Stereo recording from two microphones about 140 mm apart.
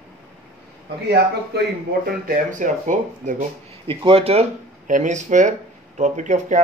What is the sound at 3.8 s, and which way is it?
Speech, 40° right (ahead or behind).